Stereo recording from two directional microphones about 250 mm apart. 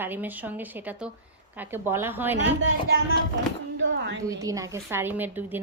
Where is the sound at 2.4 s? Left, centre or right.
Right.